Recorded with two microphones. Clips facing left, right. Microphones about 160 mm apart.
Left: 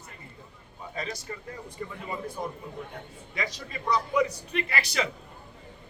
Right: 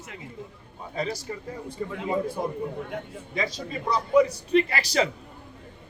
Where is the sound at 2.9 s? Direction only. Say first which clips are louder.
Right 8 dB; 90° right.